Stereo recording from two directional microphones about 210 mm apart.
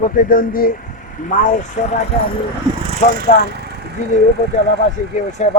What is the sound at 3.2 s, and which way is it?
Speech, 50° right (ahead or behind).